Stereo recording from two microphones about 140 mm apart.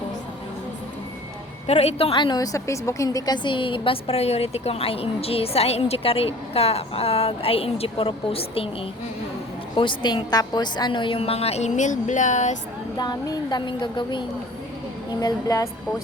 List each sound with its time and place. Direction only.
1.6 s a woman's voice: 45° left (ahead or behind)
9.7 s a woman's voice: 35° left (ahead or behind); by 12.5 s 60° left (ahead or behind)
13.0 s a woman's voice: 30° left (ahead or behind)